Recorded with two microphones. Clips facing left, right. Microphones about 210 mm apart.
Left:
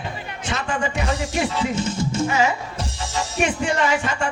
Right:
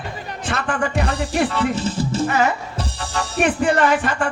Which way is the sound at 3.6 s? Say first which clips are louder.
Right 4 dB; 55° right (ahead or behind).